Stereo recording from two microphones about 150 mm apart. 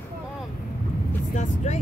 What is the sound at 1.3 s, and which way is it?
Speech, 50° left (ahead or behind).